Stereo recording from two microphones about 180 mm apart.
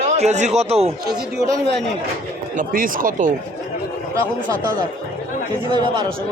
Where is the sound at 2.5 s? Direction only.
50° right (ahead or behind).